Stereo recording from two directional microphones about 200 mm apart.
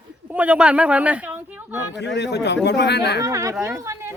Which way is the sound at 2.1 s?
60° left (ahead or behind).